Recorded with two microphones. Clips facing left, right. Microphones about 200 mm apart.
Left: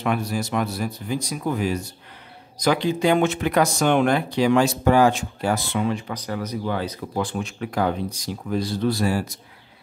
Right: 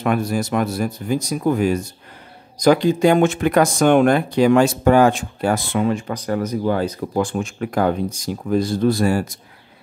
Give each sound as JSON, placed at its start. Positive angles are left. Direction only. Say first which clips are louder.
{"t": 0.0, "sound": "speech", "louder": "right 4 dB", "side_deg": -50}